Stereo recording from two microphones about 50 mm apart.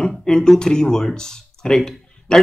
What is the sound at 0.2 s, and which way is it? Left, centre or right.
Speech, centre.